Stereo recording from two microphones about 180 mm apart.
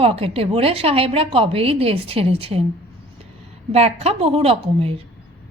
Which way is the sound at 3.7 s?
35° right (ahead or behind).